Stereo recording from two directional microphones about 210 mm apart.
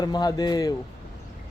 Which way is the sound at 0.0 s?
20° left (ahead or behind).